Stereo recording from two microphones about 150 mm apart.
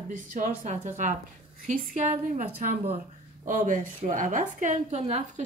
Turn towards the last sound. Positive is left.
turn(degrees=-45)  # may be behind; listen again after turning